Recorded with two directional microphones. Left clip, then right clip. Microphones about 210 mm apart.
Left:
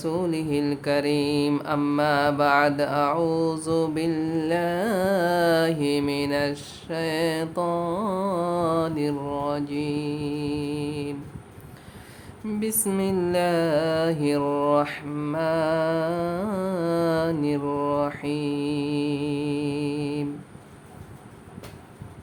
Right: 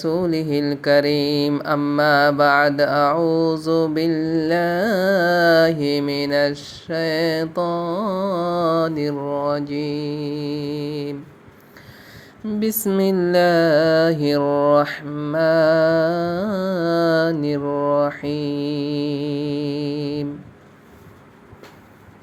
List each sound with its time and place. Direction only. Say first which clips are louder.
0.0 s mantra: right 6 dB; 20° right (ahead or behind)
7.7 s music: right 3 dB; 10° right (ahead or behind)
8.4 s mantra: right 7 dB; 20° right (ahead or behind)
12.5 s mantra: right 6 dB; 20° right (ahead or behind)